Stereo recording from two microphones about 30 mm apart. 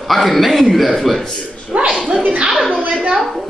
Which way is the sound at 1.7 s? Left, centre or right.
Right.